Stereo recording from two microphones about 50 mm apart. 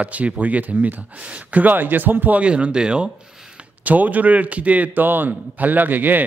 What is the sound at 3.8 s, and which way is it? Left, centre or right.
Speech, right.